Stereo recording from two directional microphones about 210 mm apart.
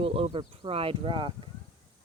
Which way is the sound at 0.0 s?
25° right (ahead or behind).